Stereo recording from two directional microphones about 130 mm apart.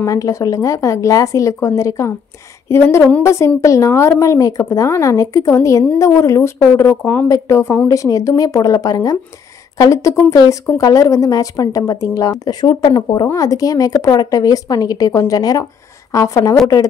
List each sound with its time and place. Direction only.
0.0 s speech: 25° left (ahead or behind)